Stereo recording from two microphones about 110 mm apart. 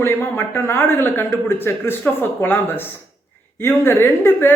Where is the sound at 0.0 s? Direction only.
20° left (ahead or behind).